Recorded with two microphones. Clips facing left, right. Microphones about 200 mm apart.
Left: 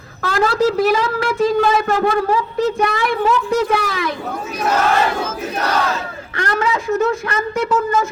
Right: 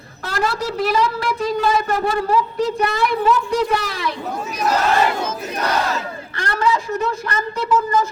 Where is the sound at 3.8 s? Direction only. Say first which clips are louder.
Left 3 dB; 50° left (ahead or behind).